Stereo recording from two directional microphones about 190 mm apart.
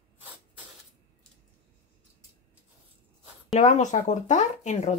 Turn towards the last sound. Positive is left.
turn(degrees=40)  # may be behind; listen again after turning